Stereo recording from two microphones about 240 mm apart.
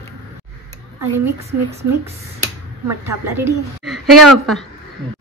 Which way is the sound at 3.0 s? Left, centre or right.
Centre.